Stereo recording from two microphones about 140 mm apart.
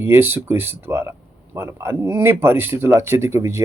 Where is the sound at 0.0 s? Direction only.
15° right (ahead or behind).